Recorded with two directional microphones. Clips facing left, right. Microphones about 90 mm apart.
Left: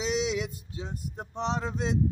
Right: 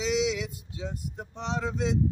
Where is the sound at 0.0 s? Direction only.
35° left (ahead or behind).